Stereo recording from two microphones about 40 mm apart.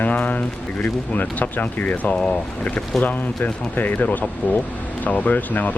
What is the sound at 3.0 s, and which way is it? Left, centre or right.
Speech, left.